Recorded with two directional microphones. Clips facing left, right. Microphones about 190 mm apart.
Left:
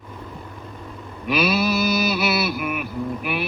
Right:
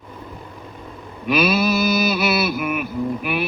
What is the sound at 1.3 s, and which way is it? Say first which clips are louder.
Music: right 2 dB; 45° right (ahead or behind).